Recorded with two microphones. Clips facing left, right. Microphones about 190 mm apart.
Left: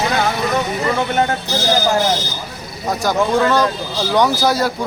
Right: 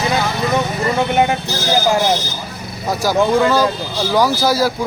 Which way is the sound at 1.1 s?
15° right (ahead or behind).